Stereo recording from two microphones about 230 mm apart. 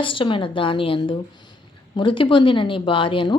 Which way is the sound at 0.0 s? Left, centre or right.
Left.